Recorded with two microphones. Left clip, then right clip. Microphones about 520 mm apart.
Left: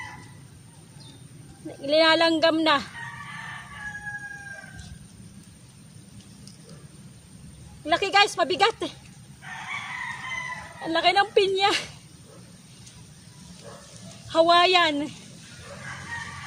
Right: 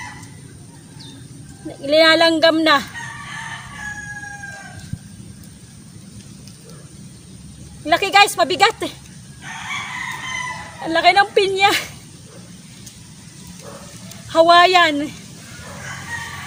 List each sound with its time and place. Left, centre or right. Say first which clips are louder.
1.8 s speech: right 7 dB; left
7.9 s a sound: right 7 dB; left
10.8 s speech: right 8 dB; left
14.3 s speech: right 7 dB; left